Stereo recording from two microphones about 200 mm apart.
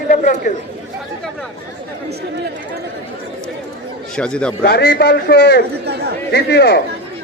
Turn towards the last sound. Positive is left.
turn(degrees=55)  # may be behind; listen again after turning